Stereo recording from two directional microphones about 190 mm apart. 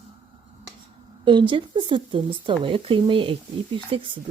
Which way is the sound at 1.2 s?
25° right (ahead or behind).